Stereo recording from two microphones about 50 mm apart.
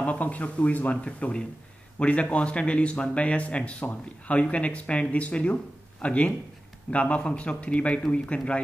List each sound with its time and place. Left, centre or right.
0.0 s speech: left